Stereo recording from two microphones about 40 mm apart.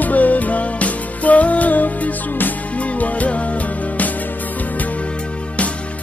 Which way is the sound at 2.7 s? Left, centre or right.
Left.